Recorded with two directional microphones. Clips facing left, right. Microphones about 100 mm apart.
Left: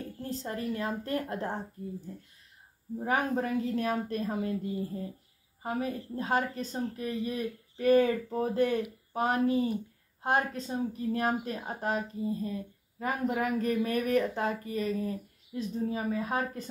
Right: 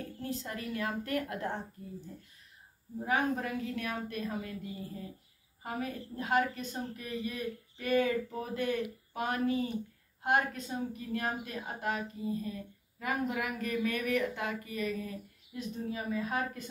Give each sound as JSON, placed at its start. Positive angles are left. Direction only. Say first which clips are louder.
{"t": 0.2, "sound": "speech", "louder": "left 4 dB", "side_deg": 35}
{"t": 3.1, "sound": "speech", "louder": "left 2 dB", "side_deg": 35}